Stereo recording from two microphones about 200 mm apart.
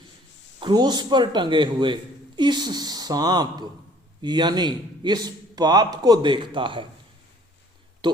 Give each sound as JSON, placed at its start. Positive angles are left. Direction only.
{"t": 0.6, "sound": "a man's voice", "side_deg": -20}
{"t": 8.0, "sound": "speech", "side_deg": -20}